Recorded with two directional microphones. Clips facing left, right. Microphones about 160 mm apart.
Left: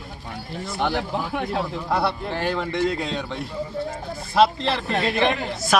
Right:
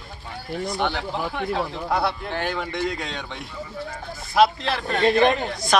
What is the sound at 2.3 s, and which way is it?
Speech, 30° left (ahead or behind).